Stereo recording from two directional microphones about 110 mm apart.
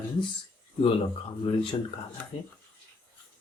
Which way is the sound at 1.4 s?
55° left (ahead or behind).